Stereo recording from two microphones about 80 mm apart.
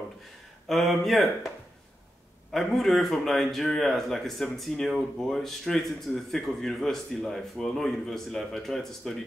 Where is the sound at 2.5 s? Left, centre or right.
Centre.